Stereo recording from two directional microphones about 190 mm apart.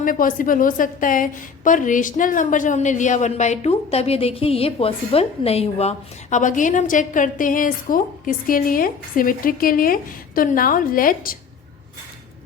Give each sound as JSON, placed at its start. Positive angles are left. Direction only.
{"t": 0.0, "sound": "a woman's voice", "side_deg": 45}